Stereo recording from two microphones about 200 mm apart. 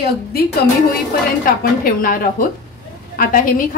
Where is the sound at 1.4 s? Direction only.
45° left (ahead or behind).